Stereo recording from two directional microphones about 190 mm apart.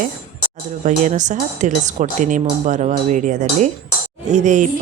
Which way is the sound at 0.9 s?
40° right (ahead or behind).